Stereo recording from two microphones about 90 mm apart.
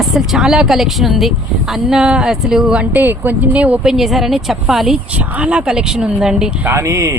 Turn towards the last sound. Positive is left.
turn(degrees=-35)  # may be behind; listen again after turning